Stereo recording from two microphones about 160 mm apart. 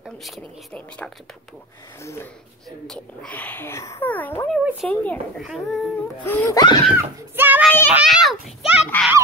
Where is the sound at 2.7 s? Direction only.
5° left (ahead or behind).